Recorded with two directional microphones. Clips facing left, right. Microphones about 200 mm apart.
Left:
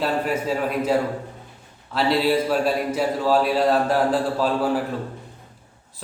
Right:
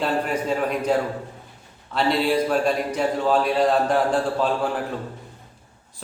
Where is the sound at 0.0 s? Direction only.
5° left (ahead or behind).